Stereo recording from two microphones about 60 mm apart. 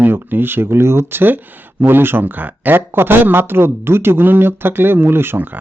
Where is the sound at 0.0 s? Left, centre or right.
Right.